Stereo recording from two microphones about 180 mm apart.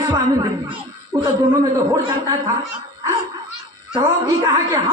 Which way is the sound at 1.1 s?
25° right (ahead or behind).